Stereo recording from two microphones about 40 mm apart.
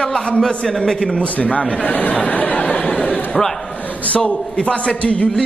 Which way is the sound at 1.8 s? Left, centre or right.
Left.